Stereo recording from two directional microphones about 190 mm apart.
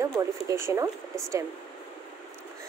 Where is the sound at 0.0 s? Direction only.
15° right (ahead or behind).